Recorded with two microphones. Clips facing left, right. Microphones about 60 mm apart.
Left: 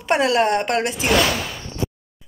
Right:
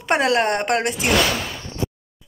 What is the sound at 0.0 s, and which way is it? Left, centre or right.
Speech, right.